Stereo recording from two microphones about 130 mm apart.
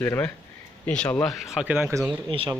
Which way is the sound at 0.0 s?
15° left (ahead or behind).